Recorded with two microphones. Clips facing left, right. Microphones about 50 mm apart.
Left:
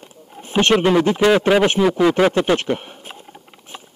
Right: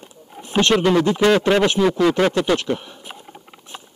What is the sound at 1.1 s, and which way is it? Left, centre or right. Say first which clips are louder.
Speech: left 1 dB; centre.